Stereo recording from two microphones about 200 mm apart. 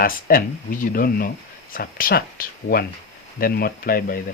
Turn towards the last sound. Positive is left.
turn(degrees=45)  # may be behind; listen again after turning